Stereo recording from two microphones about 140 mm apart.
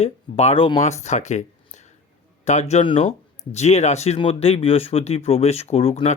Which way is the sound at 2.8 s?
40° left (ahead or behind).